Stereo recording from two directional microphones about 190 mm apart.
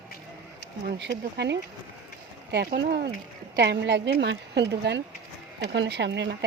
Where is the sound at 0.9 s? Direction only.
65° right (ahead or behind).